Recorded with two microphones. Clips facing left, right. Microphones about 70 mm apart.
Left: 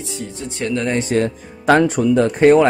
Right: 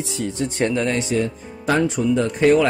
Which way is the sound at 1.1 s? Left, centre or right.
Left.